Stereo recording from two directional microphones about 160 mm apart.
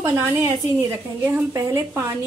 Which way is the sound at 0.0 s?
15° right (ahead or behind).